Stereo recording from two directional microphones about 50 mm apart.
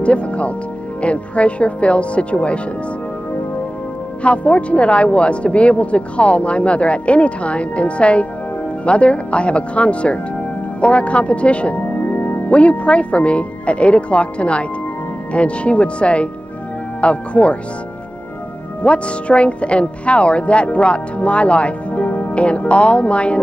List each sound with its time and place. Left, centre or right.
0.0 s speech: left
4.2 s speech: left
18.8 s speech: left